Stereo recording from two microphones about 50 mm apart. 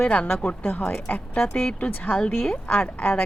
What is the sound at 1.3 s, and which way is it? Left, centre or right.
Speech, centre.